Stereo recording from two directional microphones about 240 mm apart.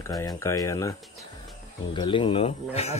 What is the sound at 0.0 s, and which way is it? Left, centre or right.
Speech, centre.